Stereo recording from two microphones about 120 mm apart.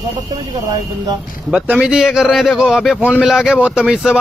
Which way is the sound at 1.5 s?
5° right (ahead or behind).